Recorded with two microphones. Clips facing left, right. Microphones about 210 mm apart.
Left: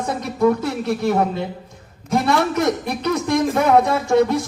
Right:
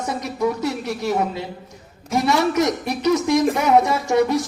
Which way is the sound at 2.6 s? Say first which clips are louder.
Even; 55° left (ahead or behind).